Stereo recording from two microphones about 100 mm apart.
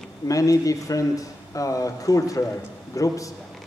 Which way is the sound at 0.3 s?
35° left (ahead or behind).